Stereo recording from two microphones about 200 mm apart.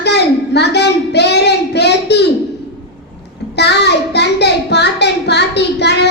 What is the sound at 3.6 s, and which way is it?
A child's voice, 55° left (ahead or behind).